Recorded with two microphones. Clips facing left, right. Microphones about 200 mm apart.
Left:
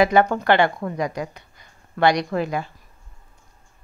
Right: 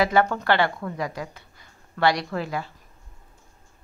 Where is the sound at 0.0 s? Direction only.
20° left (ahead or behind).